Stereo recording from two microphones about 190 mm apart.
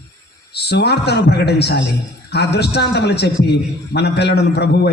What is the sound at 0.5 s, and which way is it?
A man's voice, 60° left (ahead or behind).